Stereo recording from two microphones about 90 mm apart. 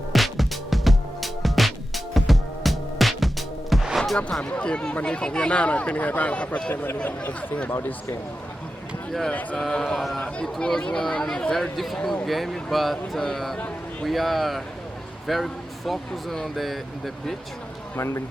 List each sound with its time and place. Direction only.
0.1 s music: centre (ahead or behind)
4.2 s speech: 10° left (ahead or behind)
9.6 s speech: 5° left (ahead or behind)
17.9 s speech: 30° left (ahead or behind)